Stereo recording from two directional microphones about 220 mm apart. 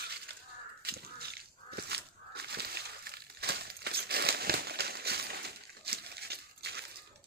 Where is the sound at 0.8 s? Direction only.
45° right (ahead or behind).